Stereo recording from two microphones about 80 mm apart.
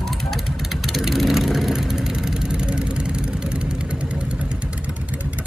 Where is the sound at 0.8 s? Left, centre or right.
Centre.